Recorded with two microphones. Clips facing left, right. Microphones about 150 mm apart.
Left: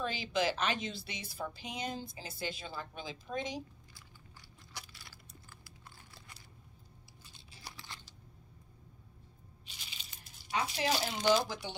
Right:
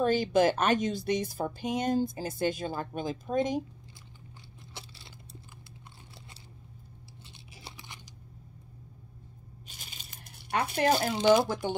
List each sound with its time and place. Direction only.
0.0 s a woman's voice: 50° right (ahead or behind)
4.7 s a sound: 25° right (ahead or behind)
7.2 s crunch: 25° right (ahead or behind)
9.7 s crumpling: 50° right (ahead or behind)
11.3 s a woman's voice: 50° right (ahead or behind)